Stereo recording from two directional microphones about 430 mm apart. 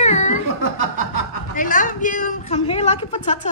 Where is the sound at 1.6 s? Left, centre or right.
Centre.